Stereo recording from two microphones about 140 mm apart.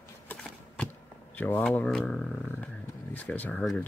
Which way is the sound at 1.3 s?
10° left (ahead or behind).